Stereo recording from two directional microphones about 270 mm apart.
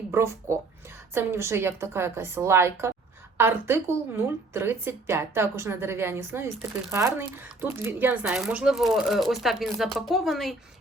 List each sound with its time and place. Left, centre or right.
0.1 s a woman's voice: centre